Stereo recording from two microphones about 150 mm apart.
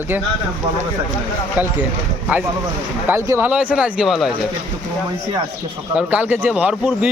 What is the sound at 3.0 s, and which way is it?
Speech, 15° right (ahead or behind).